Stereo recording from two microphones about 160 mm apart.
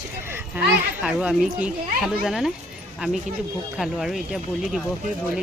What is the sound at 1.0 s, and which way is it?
Speech, 5° right (ahead or behind).